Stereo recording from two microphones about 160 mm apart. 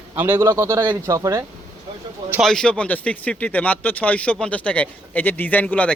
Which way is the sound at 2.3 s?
Centre (ahead or behind).